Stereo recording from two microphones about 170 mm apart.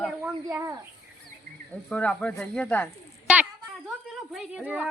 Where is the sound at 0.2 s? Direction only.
15° right (ahead or behind).